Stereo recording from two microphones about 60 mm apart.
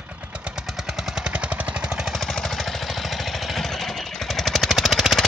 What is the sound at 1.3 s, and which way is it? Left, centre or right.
Vehicle, right.